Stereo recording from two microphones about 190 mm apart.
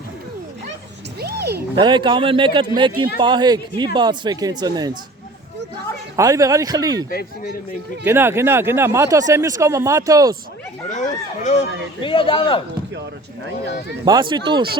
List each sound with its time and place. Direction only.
1.2 s music: 60° right (ahead or behind)
1.7 s speech: 25° right (ahead or behind)
6.1 s speech: 15° right (ahead or behind)
7.1 s speech: 55° left (ahead or behind)
8.0 s speech: 10° right (ahead or behind)
10.8 s speech: 40° left (ahead or behind)
12.0 s speech: 25° left (ahead or behind)
14.0 s speech: 25° right (ahead or behind)